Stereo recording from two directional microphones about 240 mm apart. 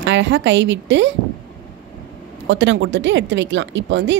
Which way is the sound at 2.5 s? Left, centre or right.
Right.